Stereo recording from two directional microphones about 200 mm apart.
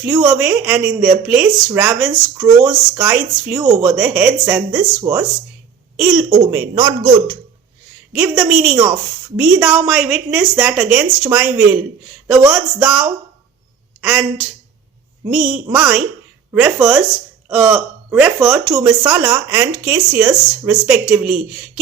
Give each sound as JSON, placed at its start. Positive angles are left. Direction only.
{"t": 0.0, "sound": "speech", "side_deg": -5}
{"t": 8.1, "sound": "speech", "side_deg": -5}